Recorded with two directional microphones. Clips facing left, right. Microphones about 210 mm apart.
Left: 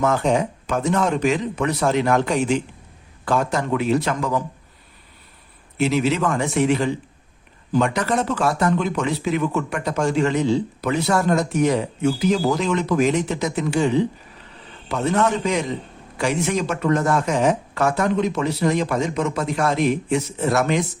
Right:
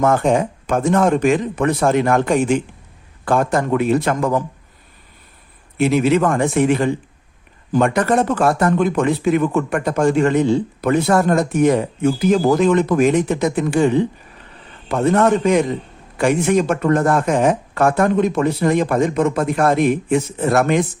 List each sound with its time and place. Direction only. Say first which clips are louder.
0.0 s speech: right 4 dB; 50° right (ahead or behind)
5.7 s a man's voice: right 5 dB; 55° right (ahead or behind)